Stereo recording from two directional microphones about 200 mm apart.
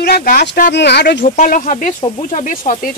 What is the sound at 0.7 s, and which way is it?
Speech, 55° left (ahead or behind).